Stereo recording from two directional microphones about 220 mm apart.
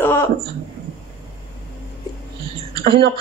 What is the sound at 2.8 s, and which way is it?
Speech, 45° right (ahead or behind).